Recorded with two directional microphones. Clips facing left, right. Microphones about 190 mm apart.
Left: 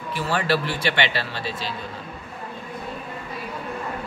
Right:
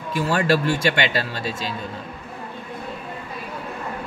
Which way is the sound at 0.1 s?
45° right (ahead or behind).